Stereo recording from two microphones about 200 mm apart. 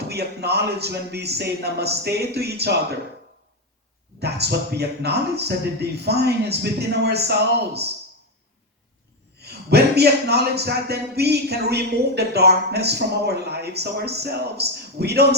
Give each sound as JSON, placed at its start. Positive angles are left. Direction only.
{"t": 0.1, "sound": "a man's voice", "side_deg": -55}
{"t": 4.2, "sound": "a man's voice", "side_deg": -55}
{"t": 9.4, "sound": "a man's voice", "side_deg": -55}